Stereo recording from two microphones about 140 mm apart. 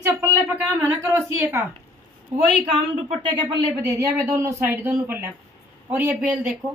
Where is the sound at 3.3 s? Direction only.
30° right (ahead or behind); by 5.3 s 15° right (ahead or behind).